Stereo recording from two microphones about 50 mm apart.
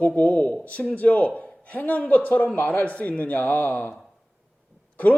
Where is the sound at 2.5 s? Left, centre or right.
Left.